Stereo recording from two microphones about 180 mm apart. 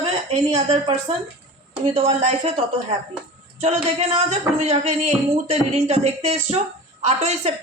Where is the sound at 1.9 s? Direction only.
35° right (ahead or behind).